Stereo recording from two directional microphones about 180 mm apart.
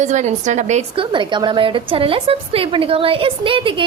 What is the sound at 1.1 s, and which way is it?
A woman's voice, 25° right (ahead or behind).